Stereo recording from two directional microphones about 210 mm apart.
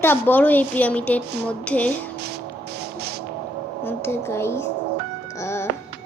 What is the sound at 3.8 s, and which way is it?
Speech, 10° left (ahead or behind).